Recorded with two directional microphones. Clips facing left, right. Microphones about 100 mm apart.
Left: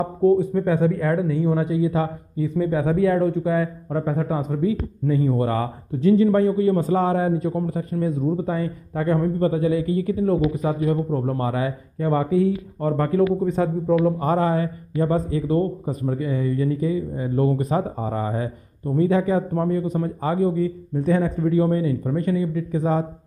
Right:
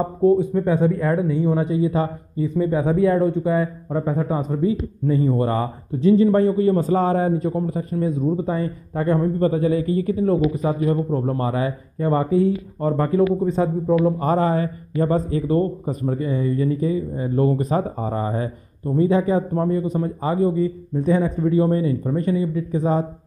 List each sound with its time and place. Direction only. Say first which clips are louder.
0.4 s a man's voice: right 1 dB; 20° right (ahead or behind)
4.3 s a man's voice: right 1 dB; 30° right (ahead or behind)
7.5 s a man's voice: right 1 dB; 20° right (ahead or behind)
12.9 s a man's voice: right 1 dB; 20° right (ahead or behind)
18.9 s a man's voice: right 1 dB; 25° right (ahead or behind)